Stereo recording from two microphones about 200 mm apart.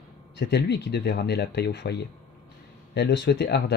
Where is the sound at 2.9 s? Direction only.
60° left (ahead or behind).